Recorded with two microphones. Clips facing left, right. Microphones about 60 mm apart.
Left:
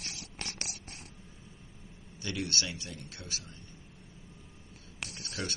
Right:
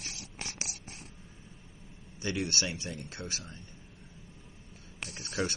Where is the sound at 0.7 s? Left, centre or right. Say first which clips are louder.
Even; centre.